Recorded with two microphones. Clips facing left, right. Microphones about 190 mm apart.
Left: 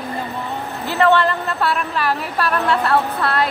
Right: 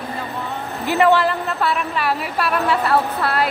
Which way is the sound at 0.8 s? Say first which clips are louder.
Even; 10° right (ahead or behind).